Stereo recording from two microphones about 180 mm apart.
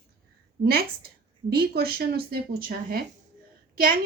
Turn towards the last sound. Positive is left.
turn(degrees=-55)  # may be behind; listen again after turning